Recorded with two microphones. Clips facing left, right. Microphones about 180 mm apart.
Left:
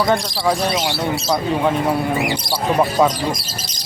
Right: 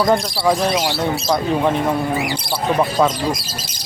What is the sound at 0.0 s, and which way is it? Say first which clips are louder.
Speech: right 2 dB; 5° right (ahead or behind).